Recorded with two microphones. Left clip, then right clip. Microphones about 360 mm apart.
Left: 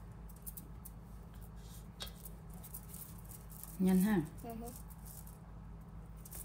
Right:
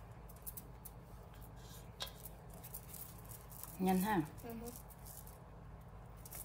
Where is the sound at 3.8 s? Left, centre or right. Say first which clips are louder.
Even; centre.